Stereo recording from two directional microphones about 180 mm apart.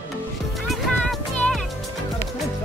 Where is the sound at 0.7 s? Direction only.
Centre (ahead or behind).